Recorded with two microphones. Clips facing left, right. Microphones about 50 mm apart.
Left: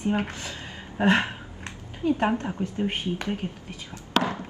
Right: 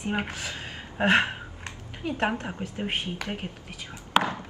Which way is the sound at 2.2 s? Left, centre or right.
Centre.